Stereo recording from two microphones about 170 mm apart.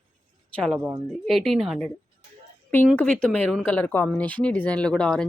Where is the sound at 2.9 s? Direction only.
5° left (ahead or behind).